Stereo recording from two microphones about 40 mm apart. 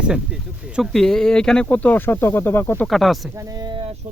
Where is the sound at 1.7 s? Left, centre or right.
Left.